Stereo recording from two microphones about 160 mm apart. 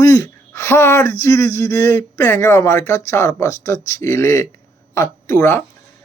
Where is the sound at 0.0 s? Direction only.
15° left (ahead or behind).